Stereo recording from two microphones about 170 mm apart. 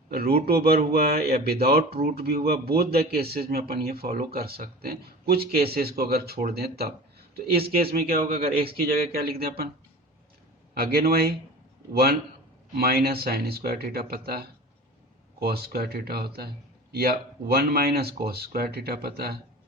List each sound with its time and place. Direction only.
0.1 s speech: 65° right (ahead or behind)
10.8 s speech: 65° right (ahead or behind)
12.7 s speech: 65° right (ahead or behind)